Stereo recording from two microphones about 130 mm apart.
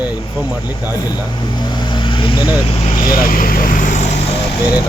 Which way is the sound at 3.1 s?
90° left.